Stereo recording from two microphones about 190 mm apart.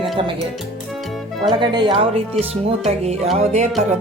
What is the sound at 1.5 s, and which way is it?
Speech, 25° right (ahead or behind).